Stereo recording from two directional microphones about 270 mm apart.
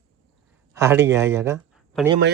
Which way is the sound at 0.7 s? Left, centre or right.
Centre.